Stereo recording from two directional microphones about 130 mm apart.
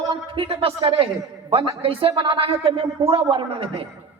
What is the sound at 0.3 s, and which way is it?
A woman's voice, 45° right (ahead or behind).